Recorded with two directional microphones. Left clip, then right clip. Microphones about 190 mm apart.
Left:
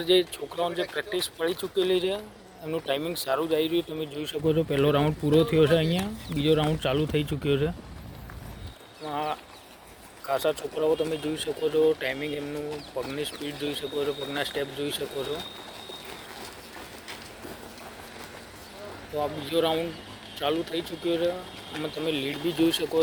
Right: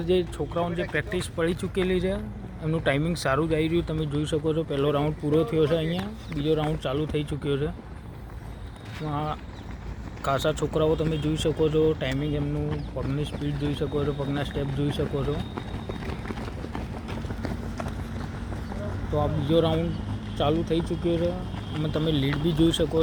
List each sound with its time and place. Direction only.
0.0 s speech: 45° left (ahead or behind)
9.0 s speech: 35° left (ahead or behind)
19.1 s speech: 40° left (ahead or behind)
22.0 s speech: 35° left (ahead or behind)